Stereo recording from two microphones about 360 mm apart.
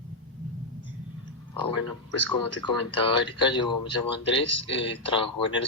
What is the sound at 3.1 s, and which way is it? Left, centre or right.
Speech, centre.